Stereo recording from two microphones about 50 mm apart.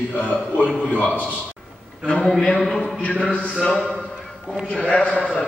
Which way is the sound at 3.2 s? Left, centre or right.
Left.